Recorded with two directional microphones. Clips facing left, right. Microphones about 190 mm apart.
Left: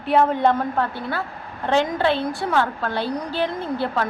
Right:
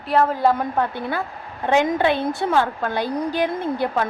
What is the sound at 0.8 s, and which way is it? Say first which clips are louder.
A woman's voice: right 1 dB; 15° right (ahead or behind).